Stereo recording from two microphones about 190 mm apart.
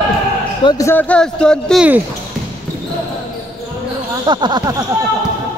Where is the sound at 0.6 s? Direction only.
15° left (ahead or behind).